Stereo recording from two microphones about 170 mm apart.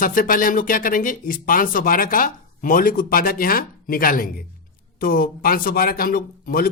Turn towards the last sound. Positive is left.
turn(degrees=60)  # may be behind; listen again after turning